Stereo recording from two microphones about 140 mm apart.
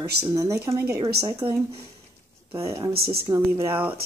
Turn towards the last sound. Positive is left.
turn(degrees=-15)  # may be behind; listen again after turning